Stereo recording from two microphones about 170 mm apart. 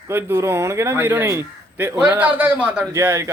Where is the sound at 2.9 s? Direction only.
20° right (ahead or behind).